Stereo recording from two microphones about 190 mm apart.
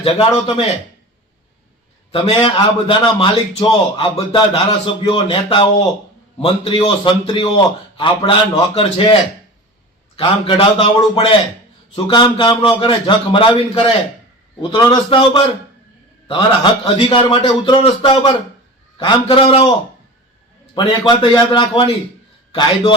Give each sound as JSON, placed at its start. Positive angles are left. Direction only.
{"t": 0.0, "sound": "a man's voice", "side_deg": 30}
{"t": 2.1, "sound": "a man's voice", "side_deg": 30}
{"t": 10.2, "sound": "a man's voice", "side_deg": 30}
{"t": 16.8, "sound": "a man's voice", "side_deg": 25}
{"t": 20.7, "sound": "a man's voice", "side_deg": 25}